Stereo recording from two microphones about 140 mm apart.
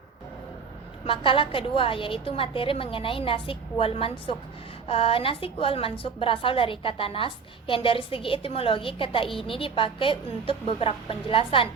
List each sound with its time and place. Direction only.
1.0 s a woman's voice: 40° left (ahead or behind)